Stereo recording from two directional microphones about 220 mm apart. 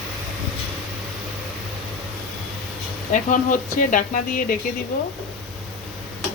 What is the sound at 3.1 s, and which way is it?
Speech, 35° left (ahead or behind).